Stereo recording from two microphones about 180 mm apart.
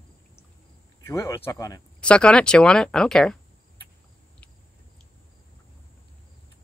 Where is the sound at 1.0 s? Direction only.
15° left (ahead or behind).